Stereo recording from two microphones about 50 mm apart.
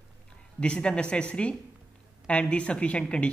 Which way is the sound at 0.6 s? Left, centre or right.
Centre.